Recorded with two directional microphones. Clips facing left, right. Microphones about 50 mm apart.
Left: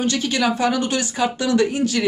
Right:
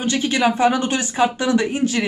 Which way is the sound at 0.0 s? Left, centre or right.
Right.